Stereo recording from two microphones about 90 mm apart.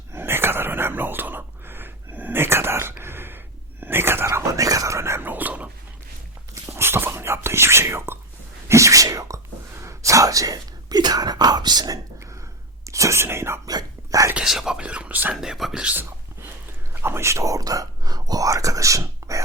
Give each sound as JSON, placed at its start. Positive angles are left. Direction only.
{"t": 0.1, "sound": "whispering", "side_deg": -25}
{"t": 6.5, "sound": "whispering", "side_deg": -30}
{"t": 12.8, "sound": "whispering", "side_deg": -35}
{"t": 13.7, "sound": "whispering", "side_deg": -45}
{"t": 14.3, "sound": "whispering", "side_deg": -5}
{"t": 15.4, "sound": "whispering", "side_deg": 0}
{"t": 15.8, "sound": "speech", "side_deg": -15}
{"t": 16.9, "sound": "whispering", "side_deg": -25}